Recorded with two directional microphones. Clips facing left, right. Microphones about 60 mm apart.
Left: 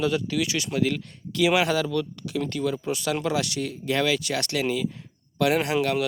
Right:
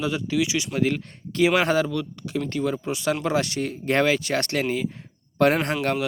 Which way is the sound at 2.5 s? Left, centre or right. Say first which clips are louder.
Right 2 dB; right.